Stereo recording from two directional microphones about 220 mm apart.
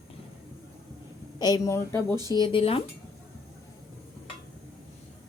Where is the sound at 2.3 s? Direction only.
25° left (ahead or behind).